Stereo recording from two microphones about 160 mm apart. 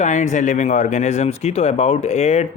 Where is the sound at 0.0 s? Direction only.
50° left (ahead or behind).